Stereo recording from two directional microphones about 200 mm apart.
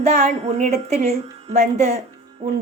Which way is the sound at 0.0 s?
35° right (ahead or behind).